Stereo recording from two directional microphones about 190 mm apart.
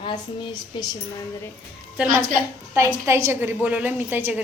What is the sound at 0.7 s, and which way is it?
Speech, 25° left (ahead or behind).